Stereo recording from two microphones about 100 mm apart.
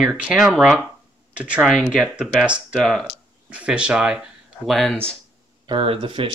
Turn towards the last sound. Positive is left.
turn(degrees=-60)  # may be behind; listen again after turning